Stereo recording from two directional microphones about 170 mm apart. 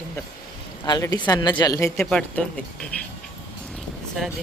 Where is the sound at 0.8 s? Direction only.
25° left (ahead or behind).